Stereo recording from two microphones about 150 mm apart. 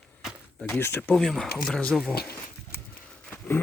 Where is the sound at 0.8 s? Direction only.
15° left (ahead or behind).